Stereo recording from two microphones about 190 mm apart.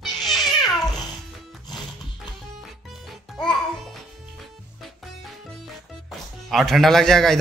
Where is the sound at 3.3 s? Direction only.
Centre (ahead or behind).